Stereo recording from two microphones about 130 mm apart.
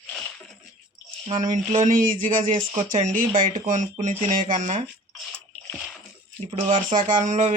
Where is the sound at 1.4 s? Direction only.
70° right (ahead or behind).